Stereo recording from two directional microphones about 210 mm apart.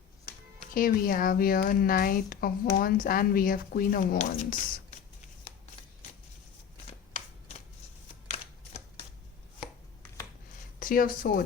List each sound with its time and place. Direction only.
0.6 s speech: 40° left (ahead or behind)
10.8 s speech: 40° left (ahead or behind)